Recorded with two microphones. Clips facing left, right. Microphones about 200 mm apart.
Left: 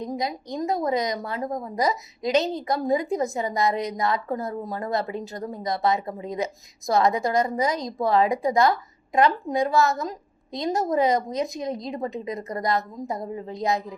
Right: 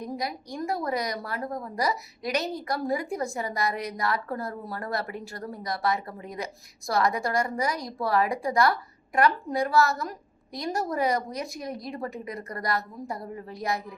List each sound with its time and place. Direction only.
0.2 s a woman's voice: 20° left (ahead or behind)